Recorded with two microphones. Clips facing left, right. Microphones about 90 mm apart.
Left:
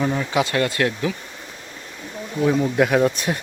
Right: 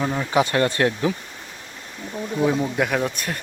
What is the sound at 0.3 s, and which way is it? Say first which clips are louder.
Speech: right 1 dB; 30° right (ahead or behind).